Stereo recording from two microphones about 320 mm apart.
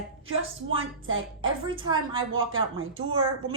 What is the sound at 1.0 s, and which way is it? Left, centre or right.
Speech, right.